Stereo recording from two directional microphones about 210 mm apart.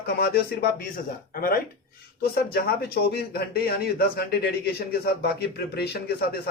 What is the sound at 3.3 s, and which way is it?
Speech, 50° left (ahead or behind).